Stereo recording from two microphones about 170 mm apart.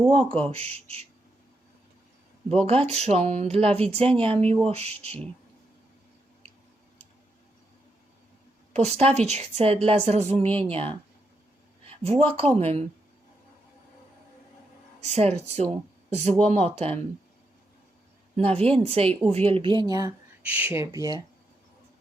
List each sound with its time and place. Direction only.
0.1 s a woman's voice: 35° right (ahead or behind)
2.5 s a woman's voice: 35° right (ahead or behind)
8.7 s a woman's voice: 40° right (ahead or behind)
15.0 s a woman's voice: 40° right (ahead or behind)
18.3 s a woman's voice: 35° right (ahead or behind)
20.5 s speech: 10° right (ahead or behind)